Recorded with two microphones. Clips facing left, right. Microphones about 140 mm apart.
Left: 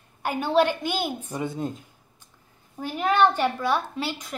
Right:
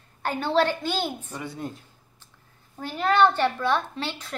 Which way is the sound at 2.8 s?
15° left (ahead or behind).